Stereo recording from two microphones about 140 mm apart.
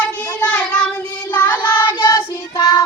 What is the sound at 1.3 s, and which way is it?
Child singing, 10° left (ahead or behind).